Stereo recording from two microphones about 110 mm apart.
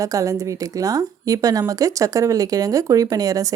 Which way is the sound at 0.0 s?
30° right (ahead or behind).